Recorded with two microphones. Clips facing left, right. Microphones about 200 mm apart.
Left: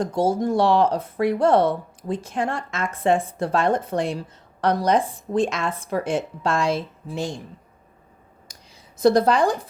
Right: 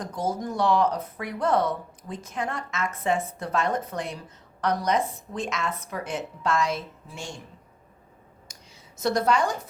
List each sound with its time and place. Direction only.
0.0 s a woman's voice: 30° left (ahead or behind)
9.0 s a woman's voice: 35° left (ahead or behind)